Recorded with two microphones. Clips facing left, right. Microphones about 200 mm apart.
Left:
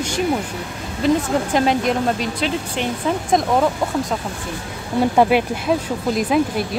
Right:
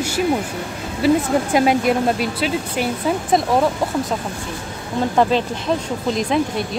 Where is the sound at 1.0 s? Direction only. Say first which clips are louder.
Right 1 dB; 10° right (ahead or behind).